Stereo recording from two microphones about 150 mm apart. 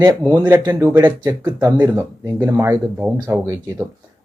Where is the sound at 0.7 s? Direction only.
20° right (ahead or behind).